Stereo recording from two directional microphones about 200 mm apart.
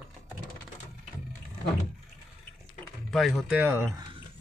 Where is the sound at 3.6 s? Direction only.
10° right (ahead or behind).